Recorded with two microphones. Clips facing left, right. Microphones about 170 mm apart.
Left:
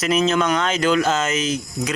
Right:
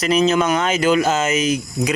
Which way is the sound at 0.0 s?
Centre (ahead or behind).